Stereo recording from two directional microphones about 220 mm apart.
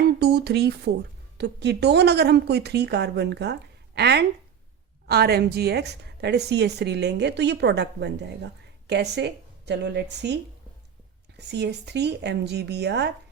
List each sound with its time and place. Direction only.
0.0 s a woman's voice: 50° right (ahead or behind)
11.3 s a woman's voice: 50° right (ahead or behind)